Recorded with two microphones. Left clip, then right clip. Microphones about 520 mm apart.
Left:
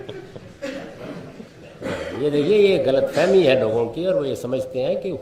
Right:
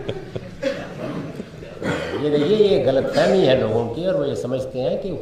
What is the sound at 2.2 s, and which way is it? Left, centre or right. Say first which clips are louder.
A man's voice: left 1 dB; left.